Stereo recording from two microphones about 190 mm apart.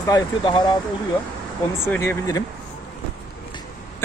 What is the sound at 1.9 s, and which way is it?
Speech, 15° left (ahead or behind).